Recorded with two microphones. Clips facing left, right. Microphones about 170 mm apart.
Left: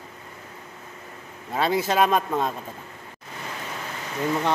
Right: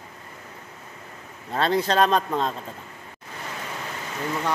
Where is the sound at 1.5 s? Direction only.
5° left (ahead or behind).